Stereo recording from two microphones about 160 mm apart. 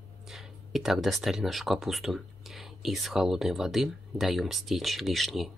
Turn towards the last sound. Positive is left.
turn(degrees=0)  # may be behind; listen again after turning